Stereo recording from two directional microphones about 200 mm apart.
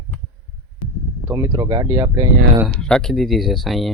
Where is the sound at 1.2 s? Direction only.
15° right (ahead or behind).